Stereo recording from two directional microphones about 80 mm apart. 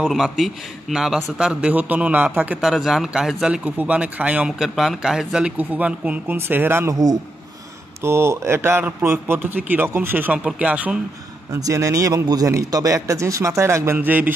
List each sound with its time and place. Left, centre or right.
0.1 s a man's voice: centre
2.6 s a man's voice: centre
4.5 s a man's voice: centre
5.6 s a man's voice: centre
6.9 s speech: right
8.0 s a man's voice: right; by 11.0 s centre
11.5 s a man's voice: right
13.9 s a man's voice: right